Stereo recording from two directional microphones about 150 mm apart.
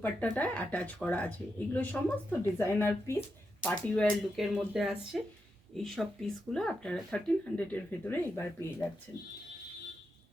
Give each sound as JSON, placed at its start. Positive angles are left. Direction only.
{"t": 0.0, "sound": "speech", "side_deg": 10}
{"t": 3.7, "sound": "speech", "side_deg": 0}